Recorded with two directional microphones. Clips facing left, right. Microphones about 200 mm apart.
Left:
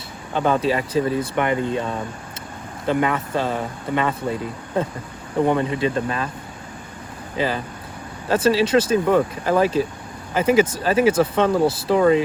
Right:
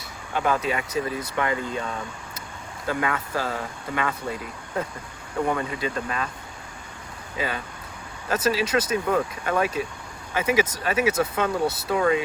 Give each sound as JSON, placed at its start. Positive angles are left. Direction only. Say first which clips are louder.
{"t": 0.3, "sound": "speech", "louder": "left 5 dB", "side_deg": 30}
{"t": 7.3, "sound": "speech", "louder": "left 6 dB", "side_deg": 30}